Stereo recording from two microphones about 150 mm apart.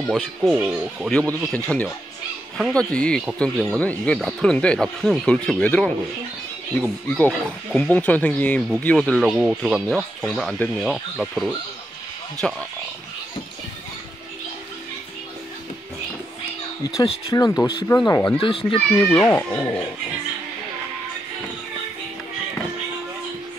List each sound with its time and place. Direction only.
0.1 s speech: 5° right (ahead or behind)
1.5 s speech: 5° left (ahead or behind)
7.2 s speech: 5° left (ahead or behind)
9.2 s speech: 5° right (ahead or behind)
16.8 s speech: 25° left (ahead or behind)
18.4 s a child's voice: 35° left (ahead or behind)
19.0 s speech: 10° left (ahead or behind)